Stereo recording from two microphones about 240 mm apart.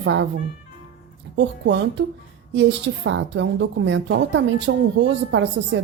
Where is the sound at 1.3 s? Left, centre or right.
Right.